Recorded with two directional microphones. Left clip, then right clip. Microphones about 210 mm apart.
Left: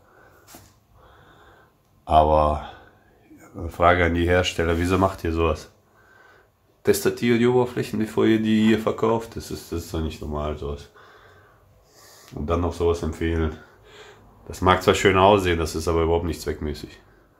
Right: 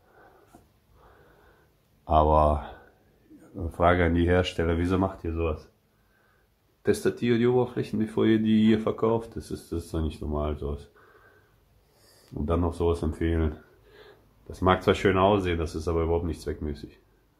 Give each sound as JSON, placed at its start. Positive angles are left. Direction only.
{"t": 2.0, "sound": "speech", "side_deg": -15}
{"t": 6.8, "sound": "speech", "side_deg": 0}
{"t": 12.3, "sound": "speech", "side_deg": -20}
{"t": 14.5, "sound": "speech", "side_deg": 0}